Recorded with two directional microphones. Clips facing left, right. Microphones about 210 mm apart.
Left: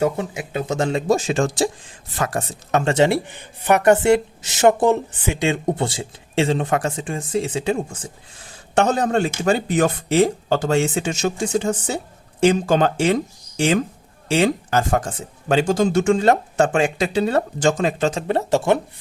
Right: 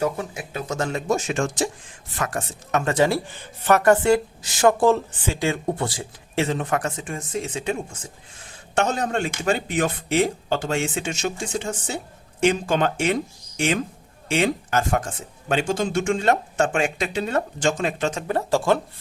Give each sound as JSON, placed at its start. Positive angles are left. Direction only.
{"t": 0.0, "sound": "speech", "side_deg": 25}
{"t": 14.3, "sound": "speech", "side_deg": 35}